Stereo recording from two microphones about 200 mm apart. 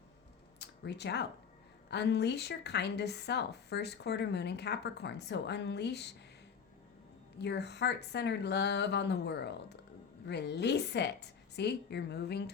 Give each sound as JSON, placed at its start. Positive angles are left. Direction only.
{"t": 0.6, "sound": "a woman's voice", "side_deg": 60}
{"t": 7.3, "sound": "a woman's voice", "side_deg": 60}